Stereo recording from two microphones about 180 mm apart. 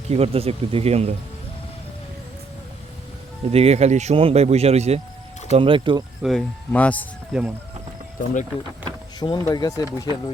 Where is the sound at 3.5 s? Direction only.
35° right (ahead or behind).